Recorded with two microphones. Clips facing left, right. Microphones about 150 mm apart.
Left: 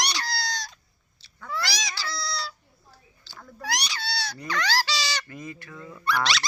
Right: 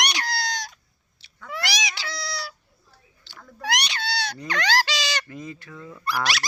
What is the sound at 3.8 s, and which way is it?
Goat, 60° right (ahead or behind).